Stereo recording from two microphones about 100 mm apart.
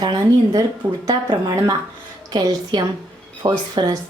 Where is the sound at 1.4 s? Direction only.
40° right (ahead or behind).